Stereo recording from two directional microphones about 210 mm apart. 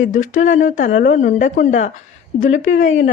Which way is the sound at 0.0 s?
35° left (ahead or behind).